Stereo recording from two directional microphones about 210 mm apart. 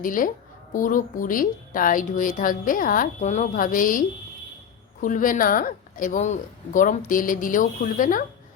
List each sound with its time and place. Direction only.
0.0 s a woman's voice: 40° left (ahead or behind)